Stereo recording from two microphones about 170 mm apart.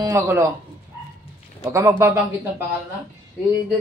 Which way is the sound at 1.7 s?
20° right (ahead or behind).